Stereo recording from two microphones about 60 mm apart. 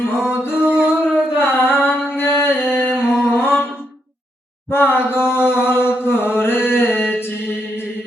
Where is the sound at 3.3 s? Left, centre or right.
Left.